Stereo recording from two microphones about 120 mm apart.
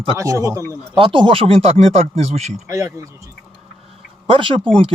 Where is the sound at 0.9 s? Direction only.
45° right (ahead or behind); by 2.6 s 65° right (ahead or behind).